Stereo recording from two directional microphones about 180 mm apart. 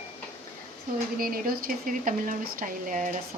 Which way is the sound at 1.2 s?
55° right (ahead or behind).